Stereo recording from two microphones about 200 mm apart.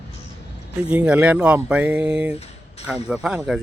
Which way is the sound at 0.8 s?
5° right (ahead or behind).